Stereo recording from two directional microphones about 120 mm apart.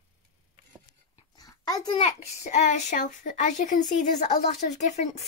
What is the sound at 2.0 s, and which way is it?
A child's voice, 70° left (ahead or behind).